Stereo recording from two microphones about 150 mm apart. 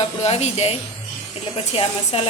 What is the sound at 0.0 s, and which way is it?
A woman's voice, 45° left (ahead or behind).